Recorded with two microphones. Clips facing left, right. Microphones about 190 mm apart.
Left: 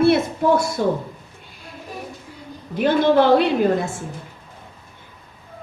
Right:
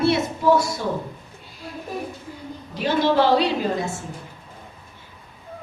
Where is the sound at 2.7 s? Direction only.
55° left (ahead or behind).